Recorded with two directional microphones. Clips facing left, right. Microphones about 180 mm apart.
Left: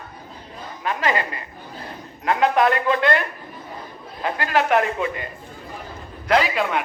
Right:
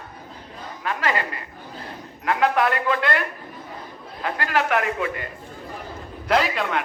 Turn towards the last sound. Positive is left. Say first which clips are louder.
# left 2 dB
turn(degrees=5)  # may be behind; listen again after turning